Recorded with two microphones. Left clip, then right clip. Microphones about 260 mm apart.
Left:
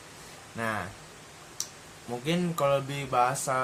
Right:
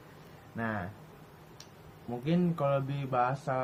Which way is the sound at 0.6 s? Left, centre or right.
Centre.